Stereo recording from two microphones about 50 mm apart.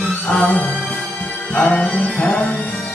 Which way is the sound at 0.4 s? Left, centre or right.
Left.